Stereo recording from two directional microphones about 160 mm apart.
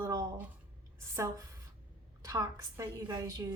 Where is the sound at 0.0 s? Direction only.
20° right (ahead or behind).